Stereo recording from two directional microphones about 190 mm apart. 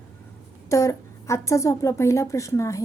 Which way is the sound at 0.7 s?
15° left (ahead or behind).